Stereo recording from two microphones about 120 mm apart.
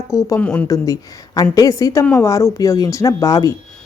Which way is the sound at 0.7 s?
30° left (ahead or behind).